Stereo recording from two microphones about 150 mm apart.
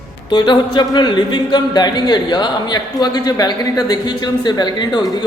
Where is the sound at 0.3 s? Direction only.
30° left (ahead or behind).